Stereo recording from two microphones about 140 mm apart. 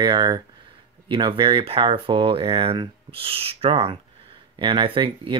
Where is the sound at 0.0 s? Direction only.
30° right (ahead or behind).